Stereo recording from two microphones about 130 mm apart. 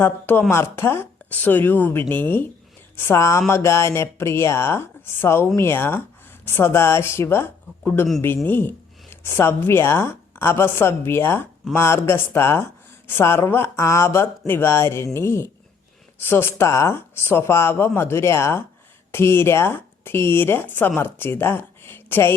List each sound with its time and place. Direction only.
0.0 s a woman's voice: 15° left (ahead or behind)